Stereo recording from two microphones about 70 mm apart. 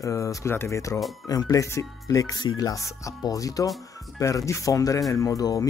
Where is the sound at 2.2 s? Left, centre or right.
Left.